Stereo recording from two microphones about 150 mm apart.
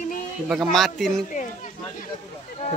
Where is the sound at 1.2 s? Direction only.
60° left (ahead or behind).